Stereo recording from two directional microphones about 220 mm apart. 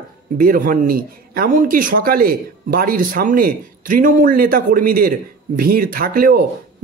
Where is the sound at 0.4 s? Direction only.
40° right (ahead or behind).